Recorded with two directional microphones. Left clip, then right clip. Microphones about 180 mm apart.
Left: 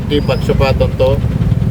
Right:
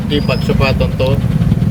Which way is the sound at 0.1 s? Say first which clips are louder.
Left 2 dB; 15° left (ahead or behind).